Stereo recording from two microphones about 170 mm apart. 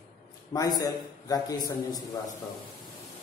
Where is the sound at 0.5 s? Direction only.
20° left (ahead or behind).